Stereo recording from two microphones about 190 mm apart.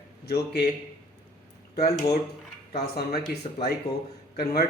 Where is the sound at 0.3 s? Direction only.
55° left (ahead or behind).